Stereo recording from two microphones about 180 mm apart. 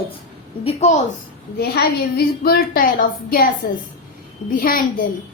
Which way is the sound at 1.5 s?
60° left (ahead or behind).